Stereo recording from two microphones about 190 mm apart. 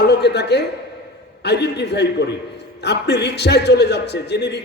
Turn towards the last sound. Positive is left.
turn(degrees=65)  # may be behind; listen again after turning